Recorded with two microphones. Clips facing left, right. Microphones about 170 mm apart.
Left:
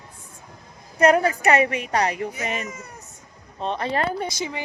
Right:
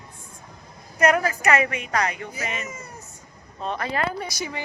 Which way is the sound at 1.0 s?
30° left (ahead or behind).